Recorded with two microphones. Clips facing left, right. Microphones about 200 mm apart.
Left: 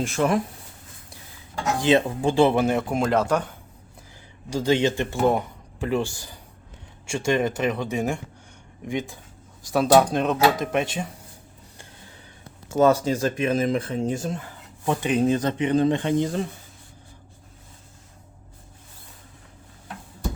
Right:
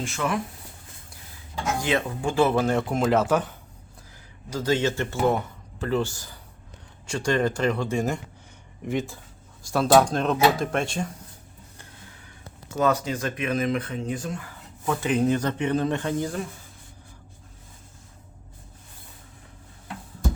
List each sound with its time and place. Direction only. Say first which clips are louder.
0.2 s speech: left 6 dB; 40° left (ahead or behind)
1.8 s speech: left 7 dB; 30° left (ahead or behind)
2.4 s speech: left 2 dB; 15° left (ahead or behind)
2.7 s speech: even; centre (ahead or behind)
4.5 s speech: left 3 dB; 15° left (ahead or behind)
7.9 s speech: even; centre (ahead or behind)
10.6 s speech: left 2 dB; 20° left (ahead or behind)
12.6 s speech: left 5 dB; 30° left (ahead or behind)